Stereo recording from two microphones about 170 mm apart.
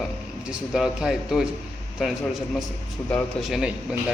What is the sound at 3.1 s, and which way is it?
Speech, centre (ahead or behind).